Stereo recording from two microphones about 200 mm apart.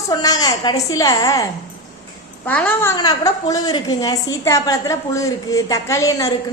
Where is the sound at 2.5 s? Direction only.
10° left (ahead or behind).